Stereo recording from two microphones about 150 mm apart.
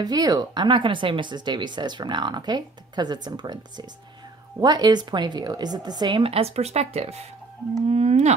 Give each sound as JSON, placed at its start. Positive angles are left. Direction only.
{"t": 0.0, "sound": "speech", "side_deg": -25}
{"t": 7.9, "sound": "whale vocalization", "side_deg": -45}